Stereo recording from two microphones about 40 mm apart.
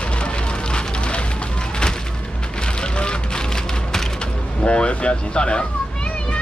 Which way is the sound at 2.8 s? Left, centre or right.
Left.